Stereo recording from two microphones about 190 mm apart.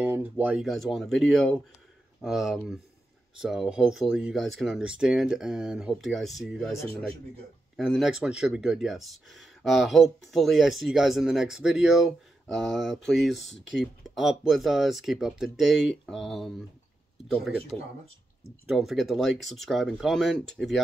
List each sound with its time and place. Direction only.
0.0 s speech: 10° right (ahead or behind)
7.7 s speech: centre (ahead or behind)